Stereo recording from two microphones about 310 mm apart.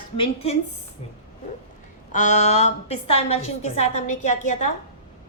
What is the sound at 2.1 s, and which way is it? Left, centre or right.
A woman's voice, left.